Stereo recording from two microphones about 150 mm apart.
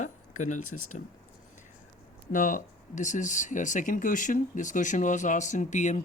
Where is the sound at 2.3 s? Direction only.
60° left (ahead or behind).